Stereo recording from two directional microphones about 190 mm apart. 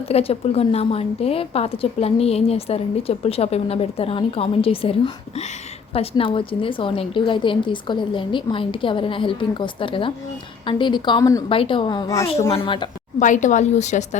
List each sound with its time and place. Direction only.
0.1 s a woman's voice: 30° left (ahead or behind)
11.5 s a woman's voice: 25° left (ahead or behind)
12.5 s a woman's voice: 25° left (ahead or behind)
13.1 s a woman's voice: 40° left (ahead or behind)